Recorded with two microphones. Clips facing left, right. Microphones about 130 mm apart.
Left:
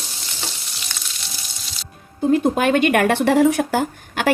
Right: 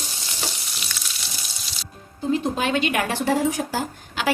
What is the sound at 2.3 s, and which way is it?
Speech, 55° left (ahead or behind).